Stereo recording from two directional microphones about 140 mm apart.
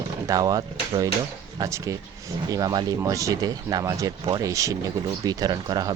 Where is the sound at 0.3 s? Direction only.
25° right (ahead or behind).